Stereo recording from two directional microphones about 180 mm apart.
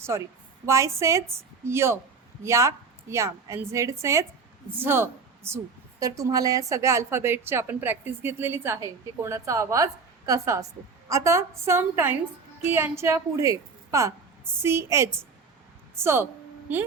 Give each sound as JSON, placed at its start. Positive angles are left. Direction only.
{"t": 0.1, "sound": "a woman's voice", "side_deg": -20}
{"t": 16.7, "sound": "a woman's voice", "side_deg": -10}